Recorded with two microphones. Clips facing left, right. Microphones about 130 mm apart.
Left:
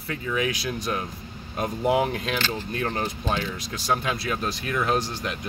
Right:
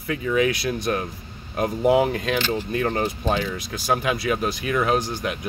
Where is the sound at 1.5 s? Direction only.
5° right (ahead or behind).